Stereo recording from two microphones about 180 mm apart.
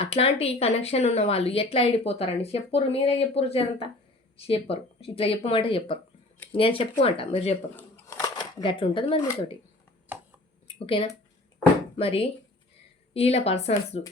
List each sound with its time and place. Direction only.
0.0 s a woman's voice: 35° left (ahead or behind)
7.8 s a sound: 15° left (ahead or behind); by 9.2 s 30° left (ahead or behind)
10.7 s a woman's voice: 30° left (ahead or behind)